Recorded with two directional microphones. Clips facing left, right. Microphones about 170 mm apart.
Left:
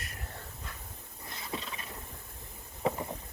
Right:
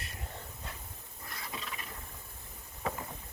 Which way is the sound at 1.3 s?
25° left (ahead or behind).